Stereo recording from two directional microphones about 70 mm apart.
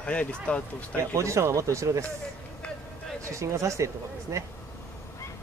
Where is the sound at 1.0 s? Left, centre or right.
Right.